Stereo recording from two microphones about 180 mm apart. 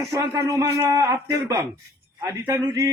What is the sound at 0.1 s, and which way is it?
A man's voice, 20° right (ahead or behind).